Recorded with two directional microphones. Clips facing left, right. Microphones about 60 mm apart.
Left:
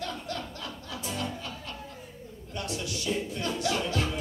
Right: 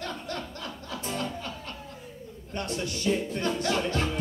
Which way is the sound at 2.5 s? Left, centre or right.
Right.